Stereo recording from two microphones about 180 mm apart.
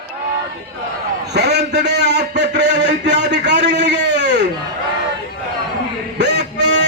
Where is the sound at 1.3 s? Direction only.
65° right (ahead or behind).